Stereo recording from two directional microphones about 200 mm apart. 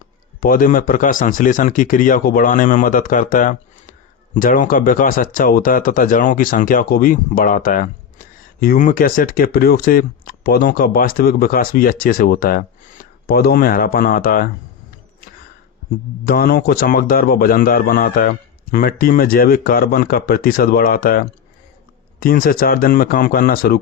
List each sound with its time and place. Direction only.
0.3 s speech: 45° left (ahead or behind)
16.2 s speech: 45° left (ahead or behind)